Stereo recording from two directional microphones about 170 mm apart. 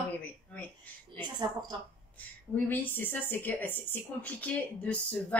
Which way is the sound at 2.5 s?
10° left (ahead or behind).